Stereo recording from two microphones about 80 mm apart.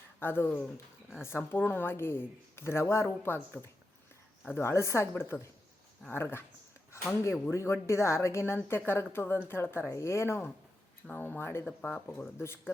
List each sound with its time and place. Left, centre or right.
0.2 s speech: left
6.9 s a sound: left
7.5 s speech: left
11.0 s speech: centre
11.6 s speech: centre
12.4 s speech: left